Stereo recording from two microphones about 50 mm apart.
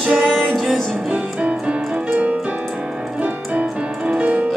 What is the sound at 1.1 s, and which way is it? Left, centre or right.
Music, right.